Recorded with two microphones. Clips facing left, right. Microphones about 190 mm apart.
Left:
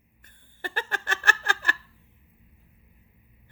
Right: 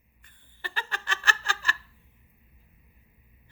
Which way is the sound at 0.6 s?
50° left (ahead or behind).